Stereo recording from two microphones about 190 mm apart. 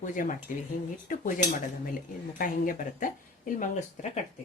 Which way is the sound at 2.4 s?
45° left (ahead or behind).